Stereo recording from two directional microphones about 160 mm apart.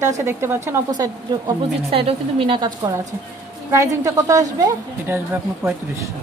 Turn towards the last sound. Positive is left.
turn(degrees=-15)  # may be behind; listen again after turning